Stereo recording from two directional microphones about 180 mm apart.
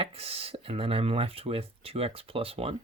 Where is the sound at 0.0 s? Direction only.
35° right (ahead or behind).